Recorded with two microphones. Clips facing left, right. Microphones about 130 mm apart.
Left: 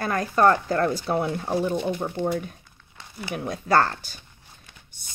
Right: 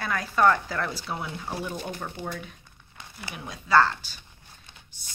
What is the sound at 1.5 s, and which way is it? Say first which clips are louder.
Speech: left 9 dB; 40° left (ahead or behind).